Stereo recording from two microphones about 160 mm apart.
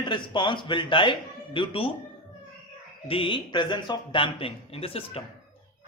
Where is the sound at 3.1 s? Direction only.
35° left (ahead or behind).